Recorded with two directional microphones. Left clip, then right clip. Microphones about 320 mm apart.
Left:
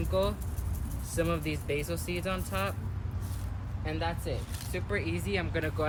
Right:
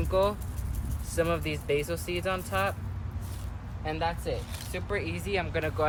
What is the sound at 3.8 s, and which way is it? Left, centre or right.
Speech, centre.